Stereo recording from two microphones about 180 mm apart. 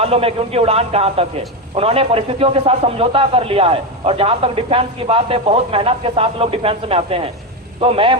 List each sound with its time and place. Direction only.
0.0 s a man's voice: 35° right (ahead or behind)